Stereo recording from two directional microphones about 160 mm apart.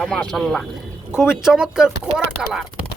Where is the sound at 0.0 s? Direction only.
5° left (ahead or behind).